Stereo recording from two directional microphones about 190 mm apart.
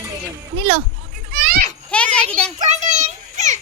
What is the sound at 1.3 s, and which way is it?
Children playing, 50° right (ahead or behind).